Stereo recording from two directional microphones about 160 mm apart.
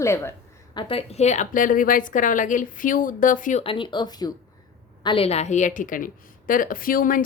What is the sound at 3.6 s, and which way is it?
A woman's voice, 30° left (ahead or behind).